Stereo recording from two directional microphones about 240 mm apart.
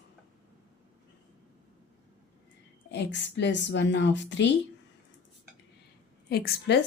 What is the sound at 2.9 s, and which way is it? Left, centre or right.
Speech, left.